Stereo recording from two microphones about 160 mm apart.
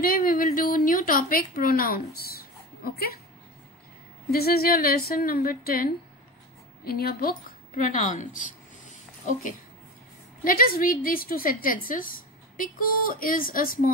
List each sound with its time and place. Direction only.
0.0 s a woman's voice: 65° left (ahead or behind)
4.3 s a woman's voice: 70° left (ahead or behind); by 8.9 s 55° left (ahead or behind)
10.4 s a woman's voice: 65° left (ahead or behind)